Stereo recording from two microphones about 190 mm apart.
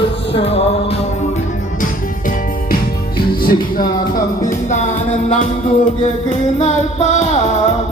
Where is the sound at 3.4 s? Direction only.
50° left (ahead or behind).